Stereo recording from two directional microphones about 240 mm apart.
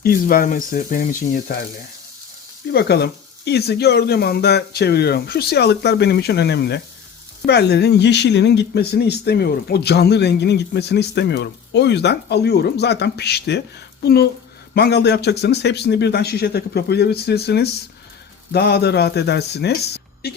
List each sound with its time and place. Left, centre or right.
0.0 s speech: left
2.7 s speech: left